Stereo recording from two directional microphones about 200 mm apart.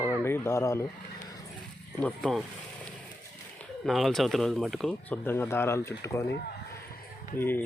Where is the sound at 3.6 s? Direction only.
Centre (ahead or behind).